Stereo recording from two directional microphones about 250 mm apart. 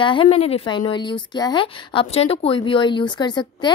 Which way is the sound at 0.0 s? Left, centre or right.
Centre.